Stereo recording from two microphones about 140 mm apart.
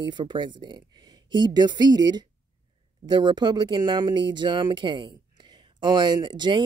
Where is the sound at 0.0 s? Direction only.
35° right (ahead or behind).